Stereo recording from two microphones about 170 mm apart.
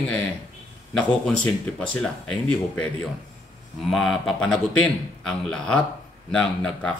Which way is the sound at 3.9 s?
Centre (ahead or behind).